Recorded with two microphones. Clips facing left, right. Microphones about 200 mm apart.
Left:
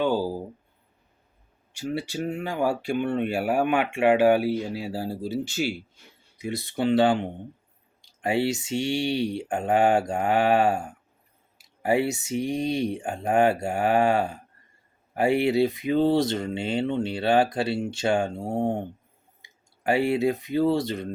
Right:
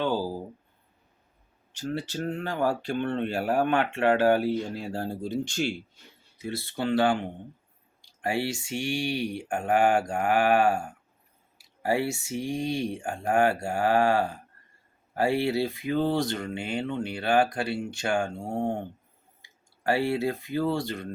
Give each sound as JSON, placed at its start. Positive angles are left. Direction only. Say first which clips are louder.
{"t": 0.0, "sound": "a sound", "louder": "left 3 dB", "side_deg": 10}
{"t": 1.7, "sound": "speech", "louder": "left 2 dB", "side_deg": 10}
{"t": 6.4, "sound": "speech", "louder": "left 4 dB", "side_deg": 15}